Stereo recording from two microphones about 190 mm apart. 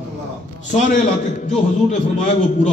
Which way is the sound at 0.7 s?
40° left (ahead or behind).